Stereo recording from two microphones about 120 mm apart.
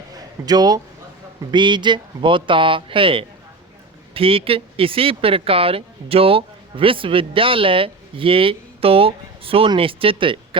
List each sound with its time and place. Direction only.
0.4 s speech: 35° right (ahead or behind)